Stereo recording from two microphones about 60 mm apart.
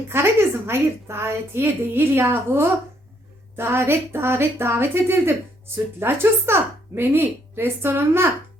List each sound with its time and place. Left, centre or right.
0.7 s a woman's voice: right